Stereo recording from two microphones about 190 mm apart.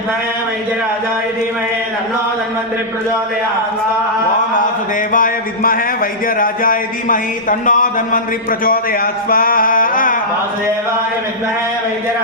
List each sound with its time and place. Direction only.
5.1 s a man's voice: 45° left (ahead or behind)